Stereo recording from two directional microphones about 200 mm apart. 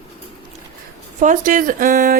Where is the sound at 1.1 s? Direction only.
40° right (ahead or behind).